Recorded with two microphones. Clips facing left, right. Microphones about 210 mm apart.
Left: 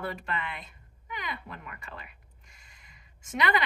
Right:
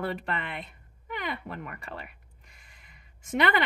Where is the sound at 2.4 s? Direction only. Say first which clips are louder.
Right 1 dB; 55° right (ahead or behind).